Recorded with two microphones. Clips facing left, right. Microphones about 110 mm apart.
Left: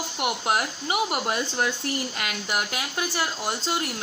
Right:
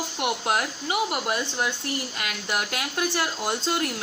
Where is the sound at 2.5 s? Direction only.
15° left (ahead or behind).